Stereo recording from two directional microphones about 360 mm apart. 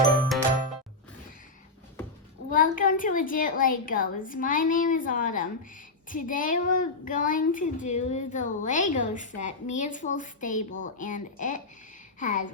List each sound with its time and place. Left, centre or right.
2.5 s a woman's voice: left